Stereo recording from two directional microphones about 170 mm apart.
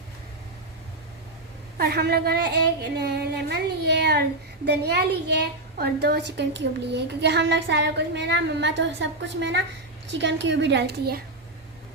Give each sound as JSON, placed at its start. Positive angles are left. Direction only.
{"t": 1.8, "sound": "a woman's voice", "side_deg": -65}